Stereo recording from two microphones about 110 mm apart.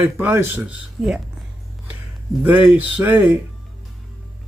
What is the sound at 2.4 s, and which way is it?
Speech, 15° right (ahead or behind).